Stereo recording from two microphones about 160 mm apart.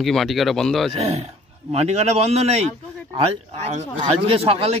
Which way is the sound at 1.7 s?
40° right (ahead or behind).